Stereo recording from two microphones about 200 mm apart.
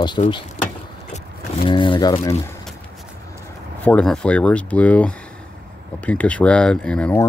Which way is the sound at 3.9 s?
5° left (ahead or behind).